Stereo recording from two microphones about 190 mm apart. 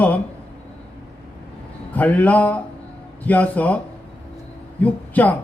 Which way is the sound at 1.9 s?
10° left (ahead or behind).